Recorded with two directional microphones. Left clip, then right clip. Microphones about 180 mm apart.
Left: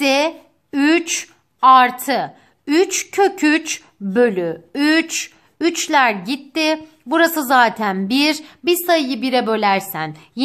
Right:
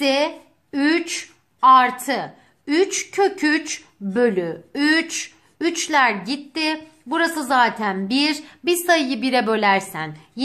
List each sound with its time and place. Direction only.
0.0 s a woman's voice: 40° left (ahead or behind)